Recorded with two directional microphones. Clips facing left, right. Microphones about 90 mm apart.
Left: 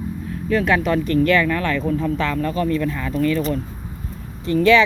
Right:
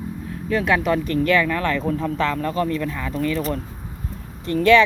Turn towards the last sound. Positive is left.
turn(degrees=-50)  # may be behind; listen again after turning